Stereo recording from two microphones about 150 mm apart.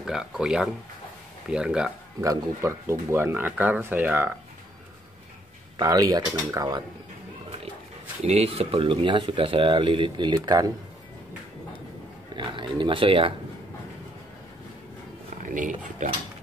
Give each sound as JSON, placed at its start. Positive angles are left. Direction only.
{"t": 0.0, "sound": "speech", "side_deg": -5}
{"t": 2.2, "sound": "speech", "side_deg": -20}
{"t": 5.8, "sound": "speech", "side_deg": -25}
{"t": 8.2, "sound": "speech", "side_deg": -45}
{"t": 12.4, "sound": "speech", "side_deg": -35}
{"t": 15.4, "sound": "speech", "side_deg": -60}